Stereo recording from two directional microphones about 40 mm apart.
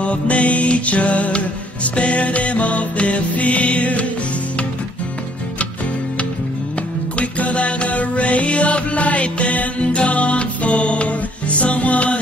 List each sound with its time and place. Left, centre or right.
0.0 s music: left
7.2 s music: left